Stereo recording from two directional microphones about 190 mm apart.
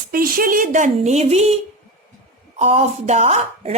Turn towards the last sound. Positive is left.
turn(degrees=-35)  # may be behind; listen again after turning